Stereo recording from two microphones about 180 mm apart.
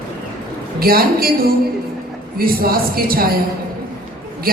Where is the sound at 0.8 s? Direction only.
55° right (ahead or behind).